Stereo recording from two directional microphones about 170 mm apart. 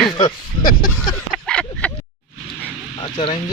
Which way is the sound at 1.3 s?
5° left (ahead or behind).